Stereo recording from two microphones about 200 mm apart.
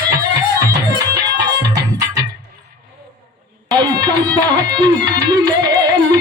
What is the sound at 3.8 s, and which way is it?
Music, 20° right (ahead or behind).